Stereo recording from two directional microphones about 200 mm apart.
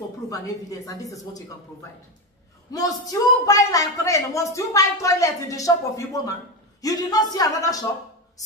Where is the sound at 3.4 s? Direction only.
15° left (ahead or behind).